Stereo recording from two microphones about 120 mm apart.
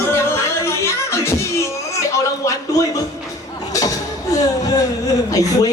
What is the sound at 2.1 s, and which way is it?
Music, 25° left (ahead or behind).